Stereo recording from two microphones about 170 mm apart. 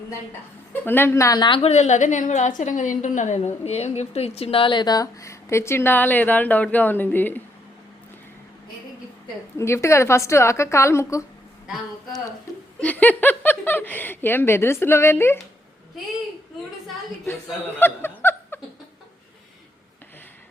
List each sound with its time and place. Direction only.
0.7 s a woman's voice: 10° left (ahead or behind)
9.6 s speech: 15° left (ahead or behind)
12.8 s speech: 10° left (ahead or behind)
17.7 s snicker: 10° left (ahead or behind)